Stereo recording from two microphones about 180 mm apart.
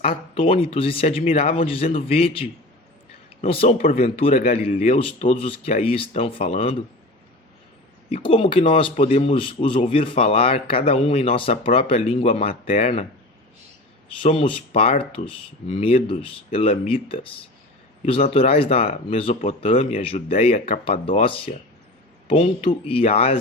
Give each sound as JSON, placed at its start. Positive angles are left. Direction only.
{"t": 0.0, "sound": "speech", "side_deg": 30}
{"t": 8.1, "sound": "speech", "side_deg": 30}
{"t": 14.2, "sound": "speech", "side_deg": 30}